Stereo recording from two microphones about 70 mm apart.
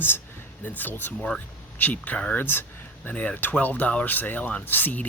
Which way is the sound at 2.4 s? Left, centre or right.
Left.